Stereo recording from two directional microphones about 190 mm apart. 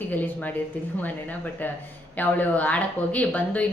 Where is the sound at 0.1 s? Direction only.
10° left (ahead or behind).